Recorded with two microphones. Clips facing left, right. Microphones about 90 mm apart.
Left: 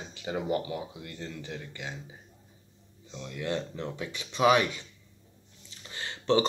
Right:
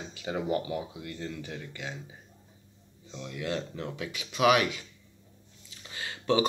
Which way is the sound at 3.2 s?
15° right (ahead or behind).